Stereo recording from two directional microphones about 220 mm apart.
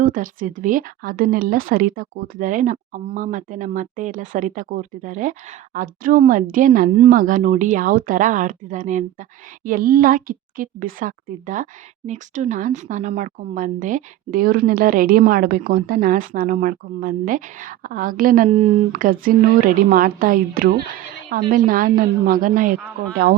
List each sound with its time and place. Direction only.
0.0 s a woman's voice: 40° right (ahead or behind)